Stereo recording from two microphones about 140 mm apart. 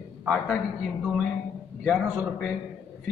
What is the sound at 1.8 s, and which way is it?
Speech, centre (ahead or behind).